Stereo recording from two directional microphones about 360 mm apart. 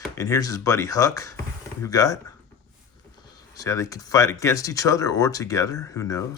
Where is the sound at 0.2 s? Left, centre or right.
Centre.